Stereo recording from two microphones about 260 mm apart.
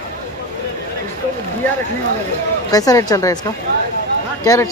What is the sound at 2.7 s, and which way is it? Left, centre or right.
Speech, centre.